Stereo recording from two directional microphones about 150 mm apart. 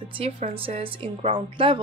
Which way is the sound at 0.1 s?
40° right (ahead or behind).